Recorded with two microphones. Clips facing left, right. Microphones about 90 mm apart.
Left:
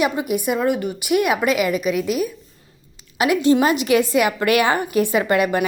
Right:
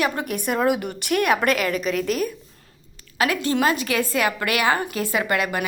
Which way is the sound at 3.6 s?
20° left (ahead or behind).